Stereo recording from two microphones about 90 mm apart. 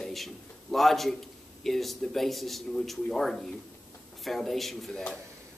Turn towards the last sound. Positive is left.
turn(degrees=0)  # may be behind; listen again after turning